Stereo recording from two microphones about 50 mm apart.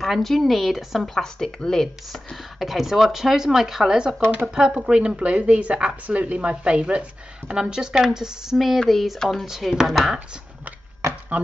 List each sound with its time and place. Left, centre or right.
0.0 s speech: centre
2.6 s a woman's voice: centre
8.5 s speech: centre
9.5 s speech: centre
11.3 s speech: right